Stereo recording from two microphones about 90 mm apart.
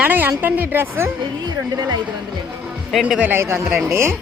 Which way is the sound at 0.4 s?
20° right (ahead or behind).